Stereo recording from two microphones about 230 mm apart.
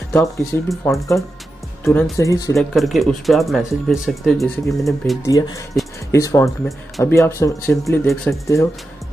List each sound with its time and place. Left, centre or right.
0.1 s speech: centre
2.5 s speech: centre
5.2 s speech: centre